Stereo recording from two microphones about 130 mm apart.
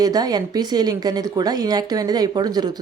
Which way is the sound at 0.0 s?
30° right (ahead or behind).